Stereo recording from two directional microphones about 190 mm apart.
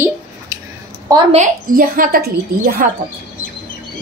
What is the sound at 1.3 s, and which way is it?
A woman's voice, 45° right (ahead or behind).